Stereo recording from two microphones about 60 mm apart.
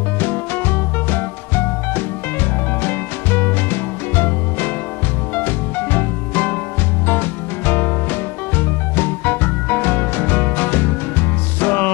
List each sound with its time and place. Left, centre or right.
0.2 s music: left